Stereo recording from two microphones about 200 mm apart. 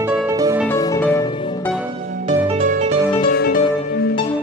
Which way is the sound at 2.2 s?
30° right (ahead or behind).